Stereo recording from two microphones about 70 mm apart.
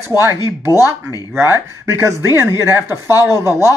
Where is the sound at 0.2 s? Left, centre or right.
Right.